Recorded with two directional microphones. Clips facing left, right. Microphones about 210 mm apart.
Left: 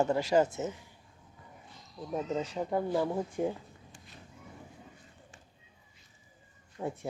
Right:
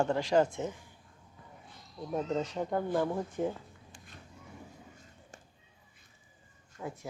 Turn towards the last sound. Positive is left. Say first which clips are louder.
# left 5 dB
turn(degrees=30)  # may be behind; listen again after turning